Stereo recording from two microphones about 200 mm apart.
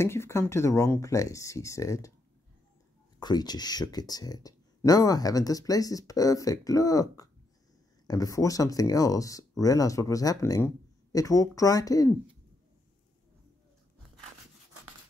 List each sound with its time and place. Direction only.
0.0 s speech: 15° left (ahead or behind)
3.2 s speech: 20° left (ahead or behind)